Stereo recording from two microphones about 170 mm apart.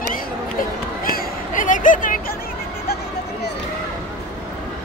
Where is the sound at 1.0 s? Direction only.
55° left (ahead or behind).